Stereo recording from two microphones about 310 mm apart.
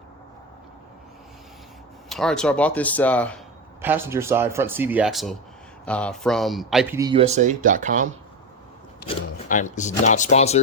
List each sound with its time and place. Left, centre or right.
2.0 s speech: centre
3.8 s speech: centre
7.0 s speech: centre
9.0 s speech: left